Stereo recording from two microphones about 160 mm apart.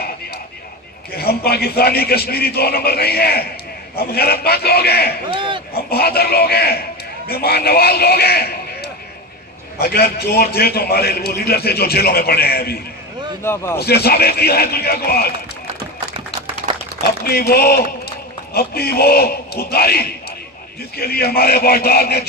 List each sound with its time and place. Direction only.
1.1 s a man's voice: 80° left
13.4 s speech: 15° left (ahead or behind)
13.7 s a man's voice: 80° left
17.0 s a man's voice: 70° left (ahead or behind)